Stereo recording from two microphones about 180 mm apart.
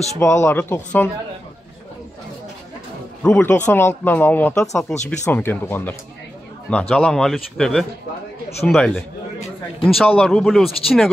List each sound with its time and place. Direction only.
0.2 s speech: 15° left (ahead or behind)
3.2 s speech: 10° left (ahead or behind)